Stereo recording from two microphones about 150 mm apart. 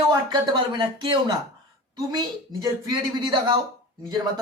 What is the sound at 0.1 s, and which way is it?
Speech, 25° right (ahead or behind).